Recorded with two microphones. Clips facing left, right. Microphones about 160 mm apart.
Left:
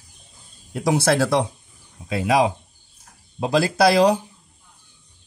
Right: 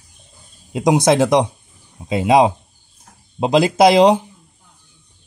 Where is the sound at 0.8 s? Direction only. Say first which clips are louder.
Right 5 dB; 20° right (ahead or behind).